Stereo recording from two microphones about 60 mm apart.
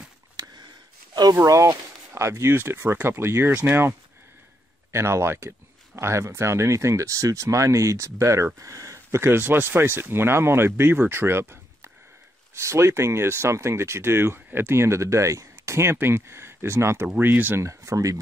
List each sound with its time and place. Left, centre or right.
0.4 s a sound: right
1.4 s speech: right
2.5 s speech: right
4.9 s speech: right
17.1 s speech: right
17.6 s speech: right